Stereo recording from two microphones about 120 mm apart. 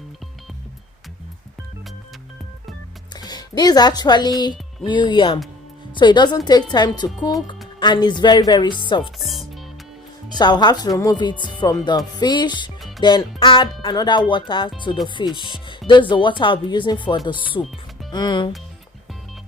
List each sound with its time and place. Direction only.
3.2 s speech: 35° left (ahead or behind)
9.1 s music: centre (ahead or behind)
10.2 s speech: 35° left (ahead or behind)
17.6 s speech: 30° left (ahead or behind)